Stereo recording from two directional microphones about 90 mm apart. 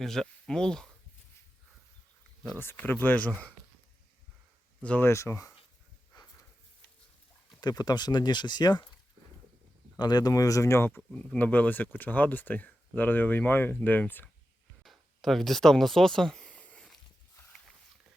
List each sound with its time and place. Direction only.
0.0 s speech: 5° left (ahead or behind)
2.6 s speech: 20° left (ahead or behind)
4.8 s speech: 15° left (ahead or behind)
5.0 s speech: 30° left (ahead or behind)
6.1 s dog: 45° left (ahead or behind)
7.6 s speech: 50° left (ahead or behind)
10.0 s speech: 50° left (ahead or behind); by 14.3 s 20° left (ahead or behind)
14.8 s speech: centre (ahead or behind)
16.4 s a sound: 15° left (ahead or behind)